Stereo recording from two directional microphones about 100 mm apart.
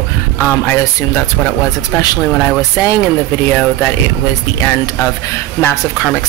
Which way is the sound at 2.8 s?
30° left (ahead or behind).